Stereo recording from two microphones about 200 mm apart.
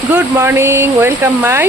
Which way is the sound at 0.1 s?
10° right (ahead or behind).